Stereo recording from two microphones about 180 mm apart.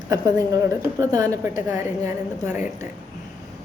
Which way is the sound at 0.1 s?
20° right (ahead or behind).